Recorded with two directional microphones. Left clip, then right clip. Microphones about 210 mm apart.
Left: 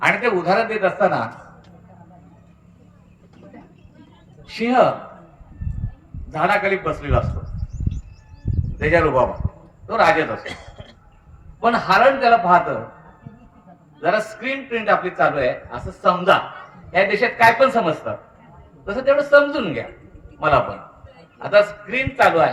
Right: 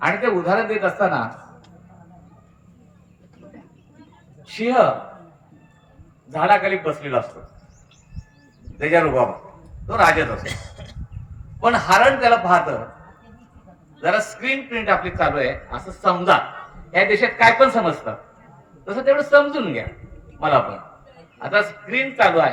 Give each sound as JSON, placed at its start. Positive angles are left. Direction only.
{"t": 0.0, "sound": "speech", "side_deg": 20}
{"t": 4.4, "sound": "speech", "side_deg": 50}
{"t": 6.3, "sound": "a man's voice", "side_deg": 35}
{"t": 8.8, "sound": "a man's voice", "side_deg": 15}
{"t": 9.8, "sound": "a man's voice", "side_deg": -20}
{"t": 10.4, "sound": "a sound", "side_deg": -50}
{"t": 11.6, "sound": "a man's voice", "side_deg": -20}
{"t": 14.0, "sound": "a man's voice", "side_deg": -50}
{"t": 16.0, "sound": "speech", "side_deg": 25}